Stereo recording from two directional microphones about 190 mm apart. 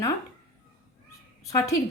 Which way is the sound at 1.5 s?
20° left (ahead or behind).